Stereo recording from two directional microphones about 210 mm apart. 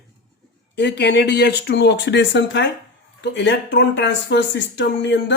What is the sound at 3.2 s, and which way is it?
Speech, 60° left (ahead or behind).